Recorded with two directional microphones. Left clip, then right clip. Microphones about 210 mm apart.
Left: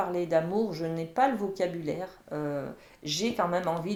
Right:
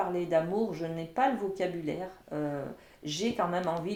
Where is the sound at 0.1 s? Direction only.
30° left (ahead or behind).